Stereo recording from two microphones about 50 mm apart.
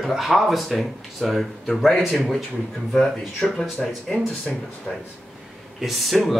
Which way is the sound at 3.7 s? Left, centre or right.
Centre.